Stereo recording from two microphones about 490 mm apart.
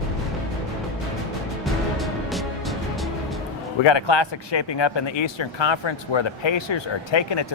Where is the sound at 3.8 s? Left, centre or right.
Left.